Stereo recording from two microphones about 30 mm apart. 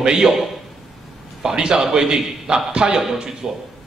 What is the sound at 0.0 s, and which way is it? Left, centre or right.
Speech, right.